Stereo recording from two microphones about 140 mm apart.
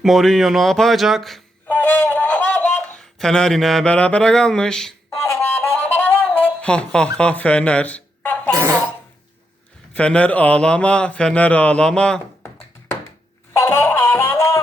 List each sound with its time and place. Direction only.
0.0 s speech: centre (ahead or behind)
1.6 s speech: 10° left (ahead or behind)
5.1 s music: 20° left (ahead or behind)
8.5 s cough: 20° right (ahead or behind)
9.9 s speech: 10° left (ahead or behind)
13.5 s music: 20° left (ahead or behind)